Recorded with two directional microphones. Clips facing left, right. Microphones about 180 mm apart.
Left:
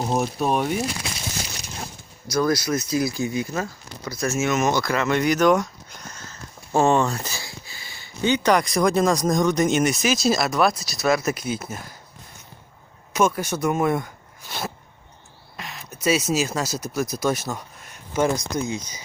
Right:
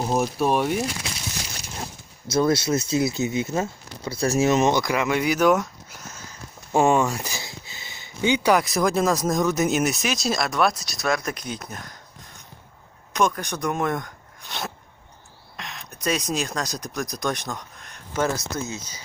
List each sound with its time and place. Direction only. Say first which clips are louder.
0.0 s speech: right 1 dB; centre (ahead or behind)
2.2 s speech: right 1 dB; 25° right (ahead or behind)
4.7 s speech: even; 15° right (ahead or behind); by 11.9 s 5° left (ahead or behind)
13.1 s speech: left 2 dB; 5° left (ahead or behind)